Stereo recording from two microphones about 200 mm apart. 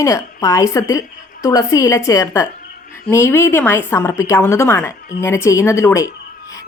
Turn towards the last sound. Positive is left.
turn(degrees=15)  # may be behind; listen again after turning